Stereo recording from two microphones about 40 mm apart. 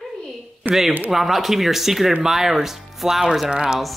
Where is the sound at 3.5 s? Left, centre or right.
Right.